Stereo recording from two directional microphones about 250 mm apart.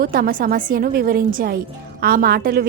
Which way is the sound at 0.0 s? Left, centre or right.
Right.